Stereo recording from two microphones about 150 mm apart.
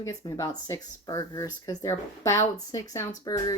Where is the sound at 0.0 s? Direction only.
20° left (ahead or behind).